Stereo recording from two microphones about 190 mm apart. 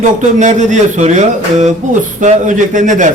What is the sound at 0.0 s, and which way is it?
Speech, 40° right (ahead or behind).